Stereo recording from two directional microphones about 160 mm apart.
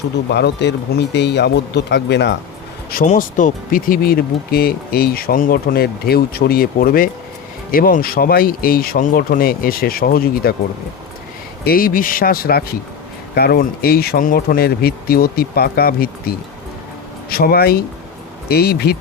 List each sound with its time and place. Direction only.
0.3 s speech: 90° left
2.9 s speech: 55° left (ahead or behind)
11.6 s speech: 65° left (ahead or behind)